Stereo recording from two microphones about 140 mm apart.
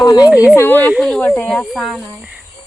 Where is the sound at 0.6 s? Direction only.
15° left (ahead or behind).